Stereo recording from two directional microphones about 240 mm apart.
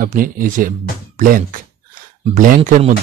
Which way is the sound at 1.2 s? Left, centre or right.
Right.